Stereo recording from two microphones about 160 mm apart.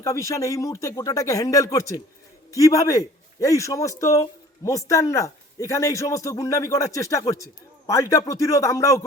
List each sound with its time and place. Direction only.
0.0 s a man's voice: 20° left (ahead or behind)